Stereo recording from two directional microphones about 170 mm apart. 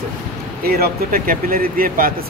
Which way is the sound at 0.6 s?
60° right (ahead or behind).